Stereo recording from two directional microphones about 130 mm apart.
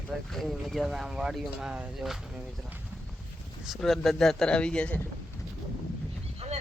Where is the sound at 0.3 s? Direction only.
Centre (ahead or behind).